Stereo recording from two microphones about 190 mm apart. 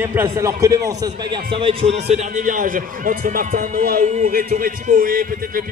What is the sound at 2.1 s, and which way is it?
A man's voice, 40° right (ahead or behind).